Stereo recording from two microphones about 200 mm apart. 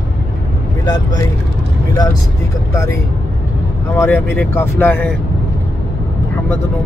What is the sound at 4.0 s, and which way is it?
Speech, 10° left (ahead or behind).